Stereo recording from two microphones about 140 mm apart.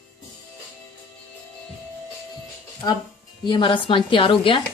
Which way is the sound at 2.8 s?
25° left (ahead or behind).